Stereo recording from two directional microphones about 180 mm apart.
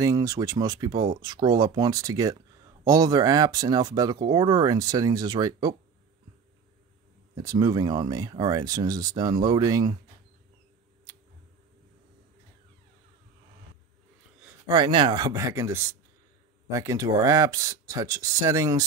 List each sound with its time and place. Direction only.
0.0 s speech: 20° right (ahead or behind)
7.4 s speech: 25° right (ahead or behind)
14.7 s speech: 25° right (ahead or behind)